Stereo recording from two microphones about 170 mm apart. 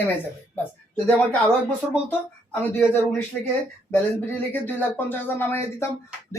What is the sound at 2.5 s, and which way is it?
Speech, 15° left (ahead or behind).